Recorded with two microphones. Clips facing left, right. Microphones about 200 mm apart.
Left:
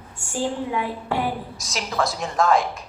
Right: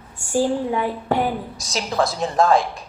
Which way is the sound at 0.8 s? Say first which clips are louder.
Right 4 dB; 40° right (ahead or behind).